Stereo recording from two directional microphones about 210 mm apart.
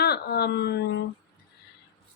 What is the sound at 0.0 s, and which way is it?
Speech, 50° left (ahead or behind).